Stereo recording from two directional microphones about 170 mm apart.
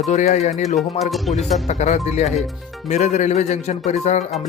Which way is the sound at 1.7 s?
40° left (ahead or behind).